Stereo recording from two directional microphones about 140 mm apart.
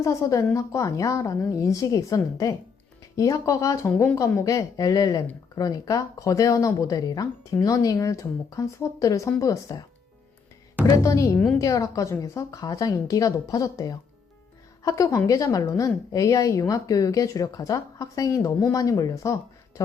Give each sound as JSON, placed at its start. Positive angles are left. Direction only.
{"t": 0.0, "sound": "speech", "side_deg": 20}
{"t": 10.8, "sound": "speech", "side_deg": 25}